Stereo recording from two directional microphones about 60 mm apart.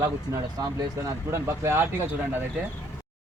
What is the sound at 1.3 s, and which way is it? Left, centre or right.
Speech, right.